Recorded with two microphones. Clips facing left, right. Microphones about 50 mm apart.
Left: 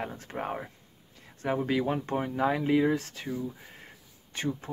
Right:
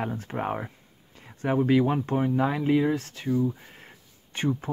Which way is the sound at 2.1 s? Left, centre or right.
Centre.